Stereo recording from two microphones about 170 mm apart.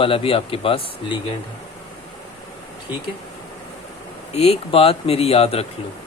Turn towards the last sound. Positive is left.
turn(degrees=35)  # may be behind; listen again after turning